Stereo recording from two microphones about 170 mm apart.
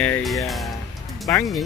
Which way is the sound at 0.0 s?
5° left (ahead or behind).